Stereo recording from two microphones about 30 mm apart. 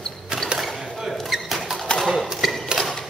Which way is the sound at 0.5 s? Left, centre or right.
Centre.